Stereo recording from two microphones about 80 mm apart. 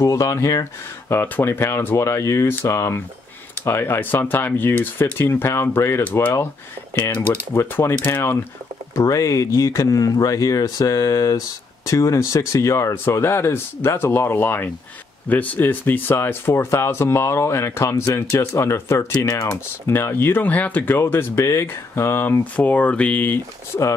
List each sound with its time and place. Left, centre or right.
0.0 s speech: left
1.2 s speech: left
7.5 s speech: left
8.9 s speech: left